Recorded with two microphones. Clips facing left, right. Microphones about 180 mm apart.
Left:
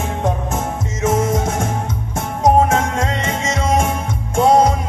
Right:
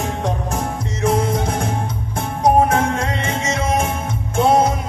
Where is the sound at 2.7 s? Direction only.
30° right (ahead or behind).